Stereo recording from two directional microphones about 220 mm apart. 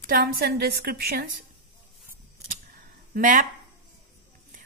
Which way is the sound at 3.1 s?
40° right (ahead or behind).